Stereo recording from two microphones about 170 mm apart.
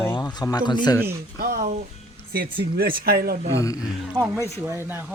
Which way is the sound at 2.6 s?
60° right (ahead or behind).